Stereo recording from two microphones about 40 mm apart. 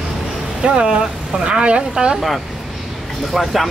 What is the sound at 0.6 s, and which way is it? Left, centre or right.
Speech, centre.